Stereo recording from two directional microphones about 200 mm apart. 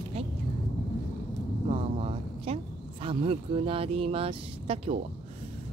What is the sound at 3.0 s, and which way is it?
Speech, 25° right (ahead or behind).